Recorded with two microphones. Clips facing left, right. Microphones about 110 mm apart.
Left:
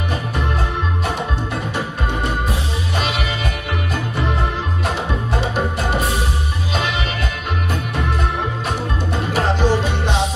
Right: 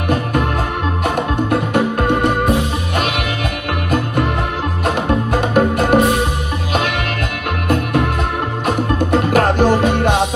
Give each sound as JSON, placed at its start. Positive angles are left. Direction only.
{"t": 1.5, "sound": "music", "side_deg": -60}
{"t": 4.8, "sound": "music", "side_deg": -55}
{"t": 7.6, "sound": "music", "side_deg": -60}